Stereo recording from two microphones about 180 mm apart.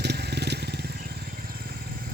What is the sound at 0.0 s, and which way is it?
Vehicle, 65° right (ahead or behind).